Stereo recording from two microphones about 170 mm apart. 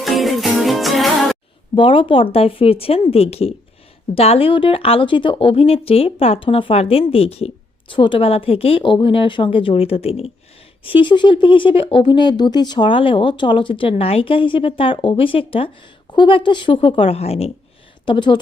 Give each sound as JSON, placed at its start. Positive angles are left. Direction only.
{"t": 0.0, "sound": "music", "side_deg": 0}
{"t": 1.7, "sound": "speech", "side_deg": 30}